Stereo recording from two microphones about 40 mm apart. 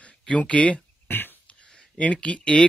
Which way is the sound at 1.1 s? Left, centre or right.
Left.